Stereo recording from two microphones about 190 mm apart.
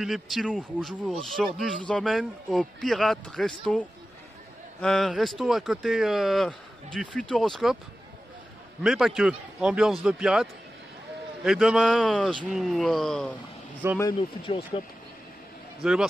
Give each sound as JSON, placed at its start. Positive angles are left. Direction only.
{"t": 0.0, "sound": "speech", "side_deg": 0}
{"t": 8.8, "sound": "speech", "side_deg": 0}
{"t": 13.8, "sound": "speech", "side_deg": -15}
{"t": 14.4, "sound": "speech", "side_deg": 30}
{"t": 15.8, "sound": "speech", "side_deg": -5}